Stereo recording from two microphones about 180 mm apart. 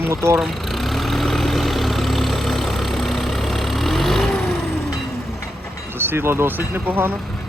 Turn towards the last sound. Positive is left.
turn(degrees=-10)  # may be behind; listen again after turning